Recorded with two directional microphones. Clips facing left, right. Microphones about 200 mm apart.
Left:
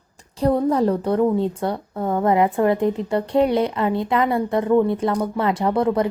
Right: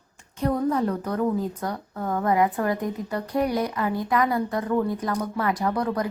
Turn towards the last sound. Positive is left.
turn(degrees=25)  # may be behind; listen again after turning